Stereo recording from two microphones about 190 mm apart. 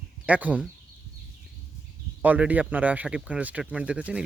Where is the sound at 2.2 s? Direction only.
10° right (ahead or behind).